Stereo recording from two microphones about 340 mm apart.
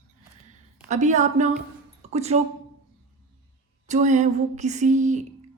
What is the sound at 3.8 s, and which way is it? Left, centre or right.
Speech, right.